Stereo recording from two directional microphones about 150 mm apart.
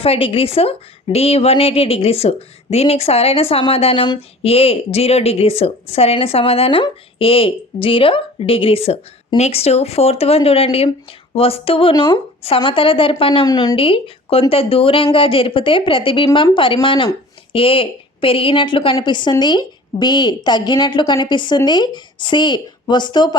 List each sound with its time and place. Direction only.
0.0 s a woman's voice: 40° left (ahead or behind)
13.5 s speech: 25° left (ahead or behind)
13.7 s a woman's voice: 35° left (ahead or behind)